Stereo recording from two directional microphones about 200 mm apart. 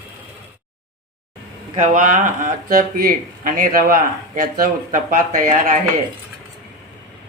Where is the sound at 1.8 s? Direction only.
40° right (ahead or behind).